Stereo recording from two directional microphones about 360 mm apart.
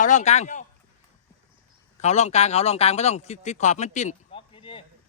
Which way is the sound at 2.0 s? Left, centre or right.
Centre.